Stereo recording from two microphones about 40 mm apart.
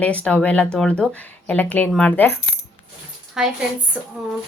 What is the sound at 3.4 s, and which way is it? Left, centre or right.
Speech, centre.